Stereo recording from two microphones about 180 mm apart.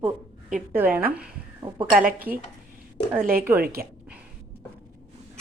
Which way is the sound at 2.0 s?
55° right (ahead or behind).